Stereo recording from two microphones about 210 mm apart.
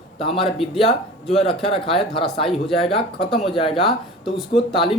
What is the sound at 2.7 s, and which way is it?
Speech, 25° left (ahead or behind).